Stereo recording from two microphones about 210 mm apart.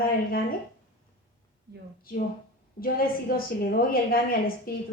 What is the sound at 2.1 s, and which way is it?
Speech, 45° left (ahead or behind).